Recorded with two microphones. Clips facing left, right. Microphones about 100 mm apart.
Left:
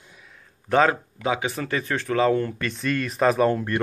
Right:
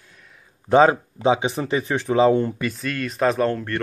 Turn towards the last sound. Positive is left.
turn(degrees=10)  # may be behind; listen again after turning